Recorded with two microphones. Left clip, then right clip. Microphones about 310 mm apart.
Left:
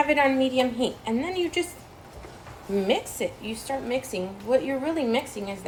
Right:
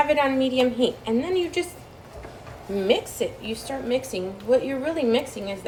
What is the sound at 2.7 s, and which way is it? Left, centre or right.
A woman's voice, left.